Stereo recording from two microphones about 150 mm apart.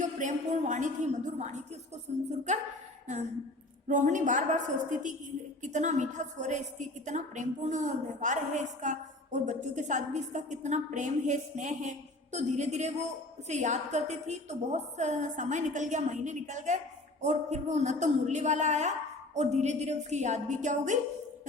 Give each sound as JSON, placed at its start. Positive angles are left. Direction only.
{"t": 0.0, "sound": "a woman's voice", "side_deg": -55}
{"t": 3.8, "sound": "a woman's voice", "side_deg": -55}